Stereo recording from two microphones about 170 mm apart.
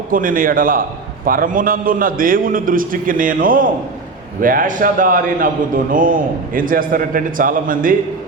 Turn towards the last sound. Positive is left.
turn(degrees=-55)  # may be behind; listen again after turning